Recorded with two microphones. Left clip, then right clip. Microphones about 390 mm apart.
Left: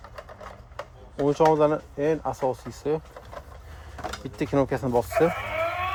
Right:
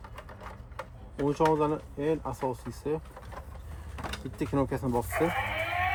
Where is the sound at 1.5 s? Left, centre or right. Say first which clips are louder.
Left 6 dB; centre.